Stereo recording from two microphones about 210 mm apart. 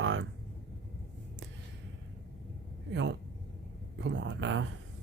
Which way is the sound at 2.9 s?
55° right (ahead or behind).